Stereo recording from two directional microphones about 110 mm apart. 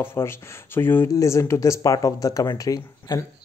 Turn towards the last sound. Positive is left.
turn(degrees=35)  # may be behind; listen again after turning